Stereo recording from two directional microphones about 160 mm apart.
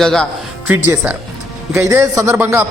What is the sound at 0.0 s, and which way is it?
Speech, 5° left (ahead or behind).